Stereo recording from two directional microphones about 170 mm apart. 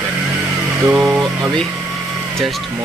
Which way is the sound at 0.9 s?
10° right (ahead or behind).